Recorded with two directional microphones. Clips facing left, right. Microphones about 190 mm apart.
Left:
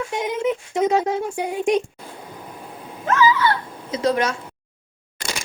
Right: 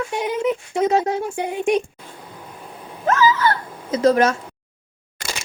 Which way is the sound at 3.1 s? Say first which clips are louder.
Right 1 dB; 40° right (ahead or behind).